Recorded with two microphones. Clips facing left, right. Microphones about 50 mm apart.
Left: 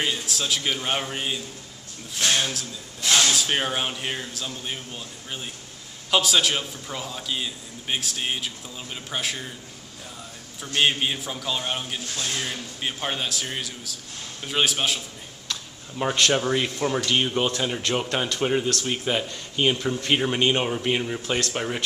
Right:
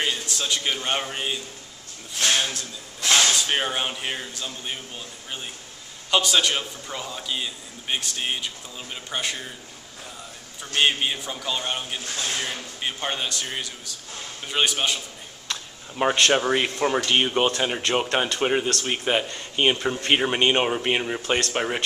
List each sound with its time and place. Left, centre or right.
0.0 s a man's voice: centre
3.3 s a man's voice: centre
10.8 s a man's voice: centre
13.0 s a man's voice: centre
15.4 s speech: right
21.4 s speech: right